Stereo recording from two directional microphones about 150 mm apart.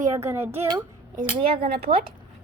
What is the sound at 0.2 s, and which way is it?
Speech, 15° right (ahead or behind).